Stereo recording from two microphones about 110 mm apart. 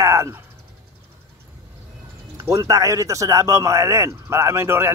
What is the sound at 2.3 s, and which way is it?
A man's voice, 30° right (ahead or behind).